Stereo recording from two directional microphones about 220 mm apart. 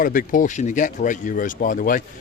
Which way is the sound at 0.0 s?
40° left (ahead or behind).